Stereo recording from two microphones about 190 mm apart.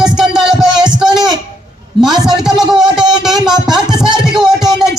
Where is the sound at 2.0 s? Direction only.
Centre (ahead or behind).